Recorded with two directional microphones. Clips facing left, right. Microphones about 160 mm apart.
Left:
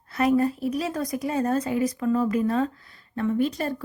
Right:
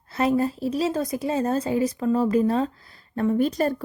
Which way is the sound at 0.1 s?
30° right (ahead or behind).